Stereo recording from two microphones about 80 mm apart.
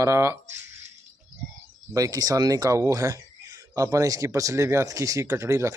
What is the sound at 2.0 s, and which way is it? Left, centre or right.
Speech, right.